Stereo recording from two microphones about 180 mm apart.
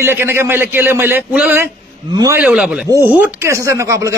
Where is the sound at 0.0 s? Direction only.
15° right (ahead or behind).